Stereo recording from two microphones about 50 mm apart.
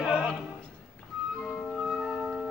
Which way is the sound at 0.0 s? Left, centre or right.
Centre.